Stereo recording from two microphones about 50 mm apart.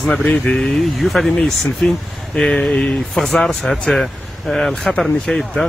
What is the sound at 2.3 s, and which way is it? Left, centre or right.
Speech, centre.